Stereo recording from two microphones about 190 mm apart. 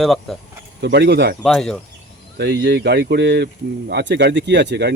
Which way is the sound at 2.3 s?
60° right (ahead or behind).